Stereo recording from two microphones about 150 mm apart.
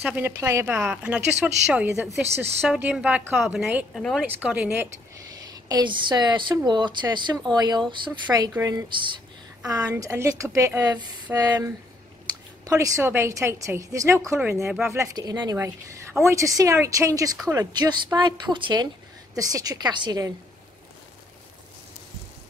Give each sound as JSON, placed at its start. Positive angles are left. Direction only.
{"t": 0.0, "sound": "speech", "side_deg": -10}
{"t": 5.5, "sound": "a woman's voice", "side_deg": -25}